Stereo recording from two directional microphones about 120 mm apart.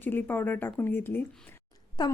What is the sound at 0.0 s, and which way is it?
Speech, 15° left (ahead or behind).